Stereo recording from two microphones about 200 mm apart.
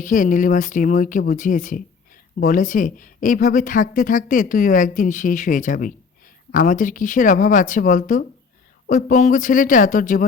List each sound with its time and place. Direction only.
0.0 s a woman's voice: 40° left (ahead or behind)